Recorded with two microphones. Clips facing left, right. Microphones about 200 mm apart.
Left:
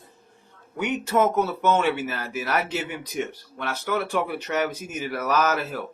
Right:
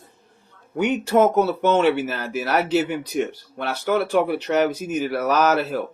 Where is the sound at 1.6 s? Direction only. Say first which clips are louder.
Right 3 dB; 35° right (ahead or behind).